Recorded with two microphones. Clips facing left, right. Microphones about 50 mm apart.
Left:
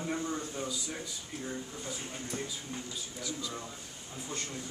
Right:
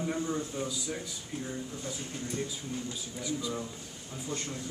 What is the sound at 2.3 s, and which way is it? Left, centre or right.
Speech, left.